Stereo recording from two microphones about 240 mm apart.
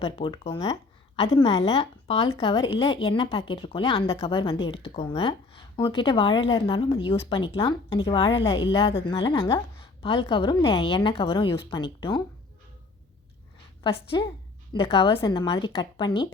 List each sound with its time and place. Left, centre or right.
0.0 s a woman's voice: left
13.8 s a woman's voice: left